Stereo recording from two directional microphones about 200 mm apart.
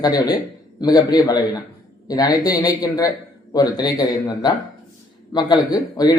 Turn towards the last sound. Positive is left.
turn(degrees=20)  # may be behind; listen again after turning